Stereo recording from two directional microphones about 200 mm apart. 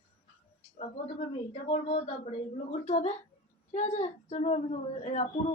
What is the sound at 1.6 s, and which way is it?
Speech, 30° left (ahead or behind).